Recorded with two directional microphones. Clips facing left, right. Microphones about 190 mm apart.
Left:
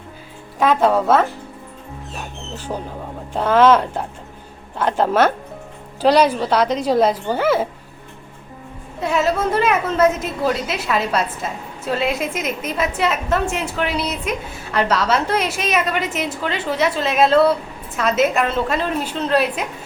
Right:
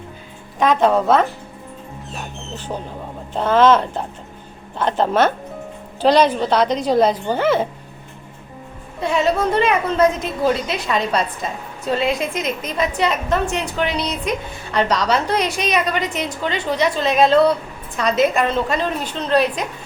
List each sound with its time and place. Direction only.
0.6 s a woman's voice: 5° left (ahead or behind)
3.3 s a woman's voice: 10° left (ahead or behind)
9.0 s a woman's voice: 5° left (ahead or behind)